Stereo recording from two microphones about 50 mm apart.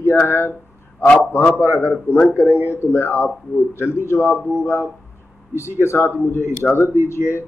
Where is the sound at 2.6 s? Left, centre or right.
Left.